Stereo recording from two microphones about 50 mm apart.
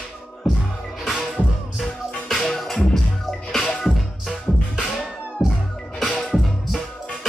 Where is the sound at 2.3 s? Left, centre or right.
Centre.